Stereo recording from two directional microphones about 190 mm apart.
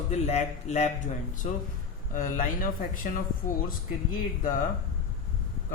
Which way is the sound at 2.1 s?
45° left (ahead or behind).